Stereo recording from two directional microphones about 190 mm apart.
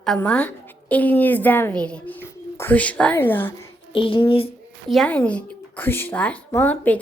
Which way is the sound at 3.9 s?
30° left (ahead or behind).